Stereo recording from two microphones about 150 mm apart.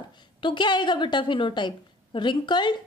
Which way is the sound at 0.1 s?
30° left (ahead or behind).